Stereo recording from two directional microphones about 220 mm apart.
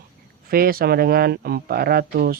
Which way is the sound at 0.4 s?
40° right (ahead or behind).